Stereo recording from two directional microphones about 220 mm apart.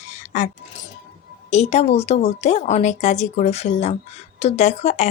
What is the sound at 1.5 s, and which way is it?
A woman's voice, 30° left (ahead or behind).